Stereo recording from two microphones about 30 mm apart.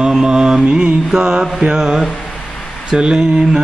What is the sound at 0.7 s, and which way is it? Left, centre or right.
Mantra, right.